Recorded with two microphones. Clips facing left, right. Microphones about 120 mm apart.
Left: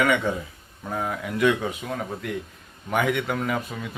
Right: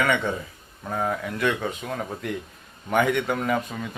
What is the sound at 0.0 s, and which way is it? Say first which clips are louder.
Speech: left 1 dB; 10° left (ahead or behind).